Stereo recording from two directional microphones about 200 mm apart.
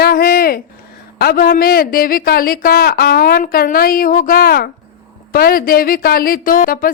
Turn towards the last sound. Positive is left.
turn(degrees=45)  # may be behind; listen again after turning